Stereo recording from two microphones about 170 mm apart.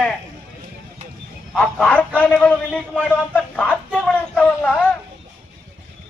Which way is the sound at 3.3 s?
10° left (ahead or behind).